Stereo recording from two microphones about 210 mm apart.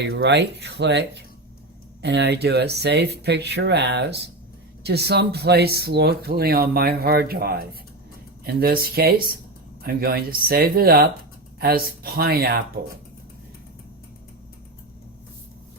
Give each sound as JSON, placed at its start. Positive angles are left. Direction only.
{"t": 0.0, "sound": "speech", "side_deg": -55}